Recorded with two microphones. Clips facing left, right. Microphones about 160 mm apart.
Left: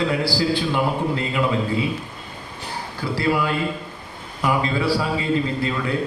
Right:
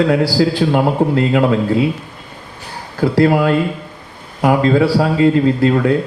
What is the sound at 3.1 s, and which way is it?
Speech, 50° right (ahead or behind).